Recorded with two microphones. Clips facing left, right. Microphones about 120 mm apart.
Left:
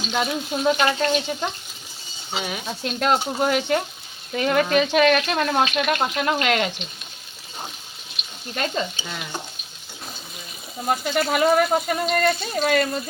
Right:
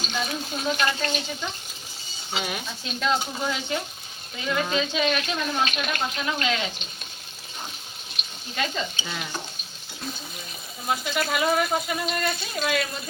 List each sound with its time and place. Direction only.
0.1 s speech: 65° left (ahead or behind)
2.3 s speech: centre (ahead or behind)
2.6 s speech: 55° left (ahead or behind)
8.5 s speech: 45° left (ahead or behind)
9.0 s speech: 5° left (ahead or behind)
10.8 s speech: 45° left (ahead or behind)